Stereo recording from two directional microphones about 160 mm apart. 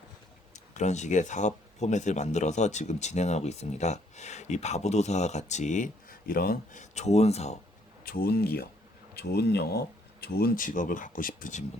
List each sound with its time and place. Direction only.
0.5 s speech: 45° left (ahead or behind); by 6.8 s 70° left (ahead or behind)
6.9 s speech: 45° left (ahead or behind)
8.0 s speech: 65° left (ahead or behind)